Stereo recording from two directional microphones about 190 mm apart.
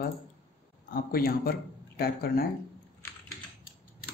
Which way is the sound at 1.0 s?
50° left (ahead or behind).